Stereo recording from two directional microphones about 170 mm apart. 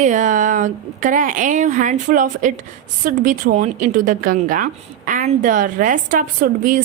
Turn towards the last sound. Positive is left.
turn(degrees=-50)  # may be behind; listen again after turning